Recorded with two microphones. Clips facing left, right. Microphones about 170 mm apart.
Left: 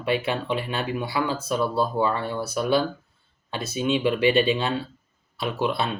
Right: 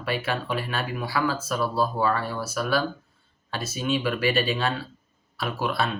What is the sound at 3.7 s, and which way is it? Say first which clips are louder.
Speech: left 4 dB; 20° left (ahead or behind).